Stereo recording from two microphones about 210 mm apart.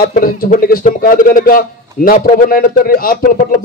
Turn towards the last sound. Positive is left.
turn(degrees=40)  # may be behind; listen again after turning